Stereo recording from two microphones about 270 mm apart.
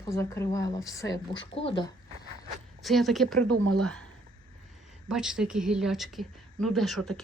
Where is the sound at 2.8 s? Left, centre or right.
Centre.